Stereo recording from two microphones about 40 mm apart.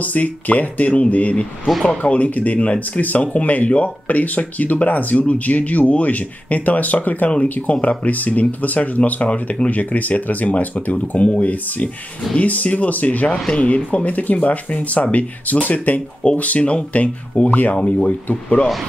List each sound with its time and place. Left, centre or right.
0.0 s speech: left
1.7 s speech: centre
2.0 s speech: left